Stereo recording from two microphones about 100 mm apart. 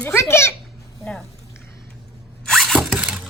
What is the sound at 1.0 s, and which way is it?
Speech, 5° left (ahead or behind).